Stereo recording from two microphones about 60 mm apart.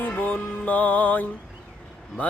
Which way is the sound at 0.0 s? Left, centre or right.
Left.